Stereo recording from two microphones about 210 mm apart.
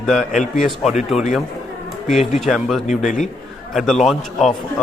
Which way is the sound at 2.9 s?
35° left (ahead or behind).